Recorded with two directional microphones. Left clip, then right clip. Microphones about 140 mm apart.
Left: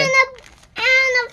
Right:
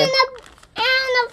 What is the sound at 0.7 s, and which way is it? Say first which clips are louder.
Cat: left 3 dB; 45° right (ahead or behind).